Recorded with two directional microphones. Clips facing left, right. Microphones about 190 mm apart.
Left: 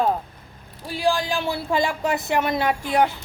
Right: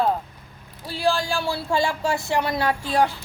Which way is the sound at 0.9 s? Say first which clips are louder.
Left 1 dB; 15° left (ahead or behind).